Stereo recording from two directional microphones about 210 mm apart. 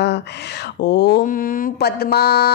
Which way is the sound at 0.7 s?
55° left (ahead or behind).